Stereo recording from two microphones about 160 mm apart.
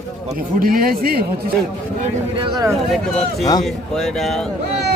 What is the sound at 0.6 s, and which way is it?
Speech, 65° right (ahead or behind).